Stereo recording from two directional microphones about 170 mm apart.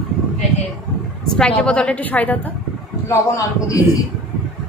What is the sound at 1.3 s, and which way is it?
A woman's voice, 5° left (ahead or behind).